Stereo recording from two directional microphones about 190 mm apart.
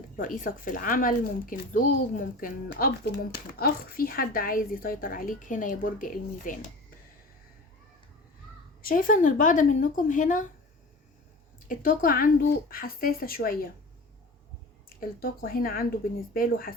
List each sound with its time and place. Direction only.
0.2 s speech: 45° left (ahead or behind)
8.8 s speech: 50° left (ahead or behind)
11.7 s speech: 45° left (ahead or behind)
14.8 s speech: 50° left (ahead or behind)